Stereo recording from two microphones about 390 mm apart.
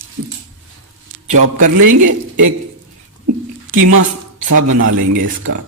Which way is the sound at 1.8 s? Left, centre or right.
Right.